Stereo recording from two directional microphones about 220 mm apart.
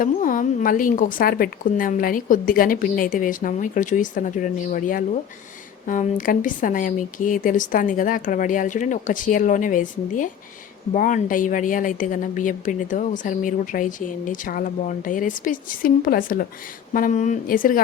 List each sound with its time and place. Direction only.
0.0 s a woman's voice: 40° left (ahead or behind)